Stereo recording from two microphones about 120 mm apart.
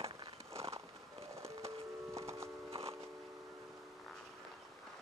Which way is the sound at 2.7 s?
55° right (ahead or behind).